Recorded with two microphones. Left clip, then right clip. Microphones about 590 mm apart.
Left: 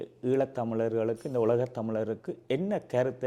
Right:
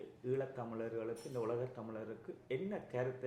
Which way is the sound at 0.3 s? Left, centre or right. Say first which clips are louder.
Left 12 dB; left.